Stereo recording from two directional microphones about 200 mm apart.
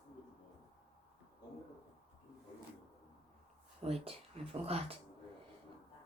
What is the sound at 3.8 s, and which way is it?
Speech, 30° right (ahead or behind).